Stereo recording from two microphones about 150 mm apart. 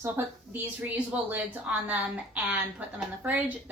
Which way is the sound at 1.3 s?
10° right (ahead or behind).